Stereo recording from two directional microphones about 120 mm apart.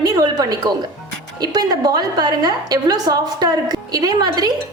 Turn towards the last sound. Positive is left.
turn(degrees=-30)  # may be behind; listen again after turning